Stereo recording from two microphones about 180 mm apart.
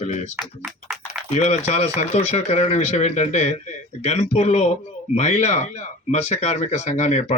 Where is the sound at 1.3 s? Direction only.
40° left (ahead or behind).